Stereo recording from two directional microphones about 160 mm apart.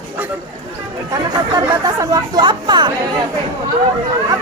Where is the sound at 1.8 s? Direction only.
20° right (ahead or behind).